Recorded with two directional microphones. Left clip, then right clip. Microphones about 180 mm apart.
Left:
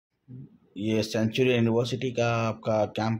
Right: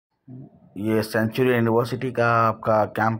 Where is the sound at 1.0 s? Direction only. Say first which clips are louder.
Right 3 dB; 5° right (ahead or behind).